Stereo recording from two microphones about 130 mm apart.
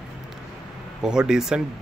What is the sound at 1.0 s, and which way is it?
Speech, 5° right (ahead or behind).